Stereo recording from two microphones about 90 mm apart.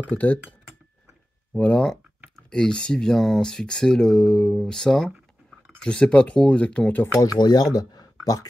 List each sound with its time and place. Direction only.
0.1 s speech: 20° left (ahead or behind)
1.6 s speech: 10° left (ahead or behind)
7.3 s speech: 50° left (ahead or behind)